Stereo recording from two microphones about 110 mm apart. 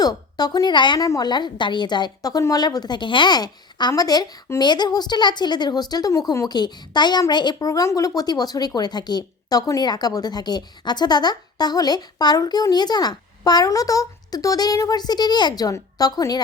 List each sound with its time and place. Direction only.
0.0 s a woman's voice: 40° left (ahead or behind)
1.0 s a woman's voice: 35° left (ahead or behind)